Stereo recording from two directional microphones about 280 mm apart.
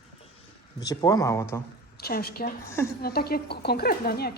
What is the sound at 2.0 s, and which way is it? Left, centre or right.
Speech, left.